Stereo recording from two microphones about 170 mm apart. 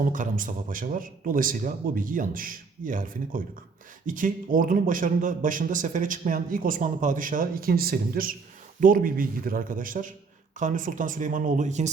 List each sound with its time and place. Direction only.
0.0 s a man's voice: 50° right (ahead or behind)